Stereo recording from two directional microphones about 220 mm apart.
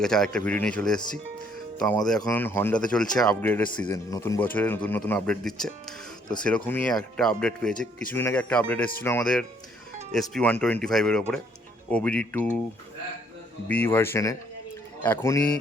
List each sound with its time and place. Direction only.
0.0 s speech: 5° left (ahead or behind)
1.8 s speech: 15° left (ahead or behind)
2.0 s speech: 5° left (ahead or behind)
13.7 s speech: 10° left (ahead or behind)